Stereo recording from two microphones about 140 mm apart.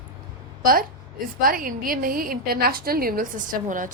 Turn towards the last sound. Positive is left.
turn(degrees=-70)  # may be behind; listen again after turning